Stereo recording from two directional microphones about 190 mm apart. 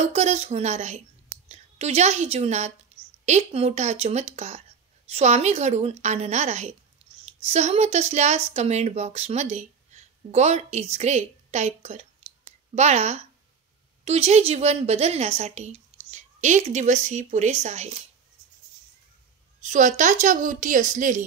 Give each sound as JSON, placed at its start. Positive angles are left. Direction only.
{"t": 0.1, "sound": "a woman's voice", "side_deg": -35}
{"t": 19.6, "sound": "a woman's voice", "side_deg": -40}